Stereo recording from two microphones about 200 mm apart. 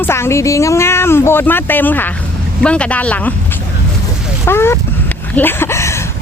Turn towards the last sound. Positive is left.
turn(degrees=15)  # may be behind; listen again after turning